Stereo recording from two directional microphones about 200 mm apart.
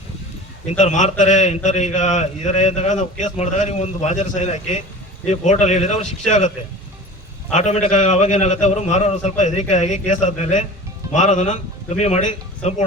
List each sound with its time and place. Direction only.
0.6 s a man's voice: 35° left (ahead or behind)
7.5 s a man's voice: 35° left (ahead or behind)